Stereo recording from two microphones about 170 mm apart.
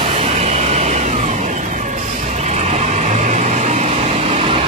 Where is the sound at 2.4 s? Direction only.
40° right (ahead or behind).